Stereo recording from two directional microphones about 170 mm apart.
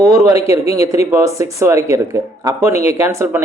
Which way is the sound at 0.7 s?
15° right (ahead or behind).